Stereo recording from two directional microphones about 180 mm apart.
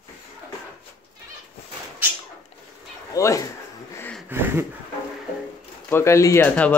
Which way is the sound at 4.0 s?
5° left (ahead or behind).